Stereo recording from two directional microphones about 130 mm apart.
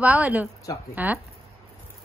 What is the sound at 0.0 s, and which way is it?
A woman's voice, 10° right (ahead or behind).